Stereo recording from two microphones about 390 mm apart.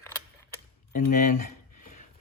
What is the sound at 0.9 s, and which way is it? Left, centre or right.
Speech, centre.